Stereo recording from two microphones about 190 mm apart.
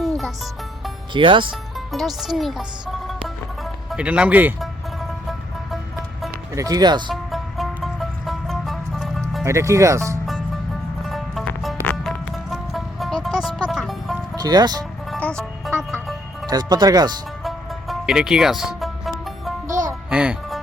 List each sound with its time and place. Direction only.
1.1 s speech: 25° right (ahead or behind)
1.9 s speech: centre (ahead or behind)
3.9 s speech: 5° right (ahead or behind)
6.5 s speech: 20° right (ahead or behind)
7.1 s music: centre (ahead or behind)
9.4 s speech: 15° right (ahead or behind)
10.2 s music: centre (ahead or behind)
14.3 s speech: 20° right (ahead or behind)
15.1 s music: 5° left (ahead or behind)
16.5 s speech: 20° right (ahead or behind)
17.4 s music: centre (ahead or behind)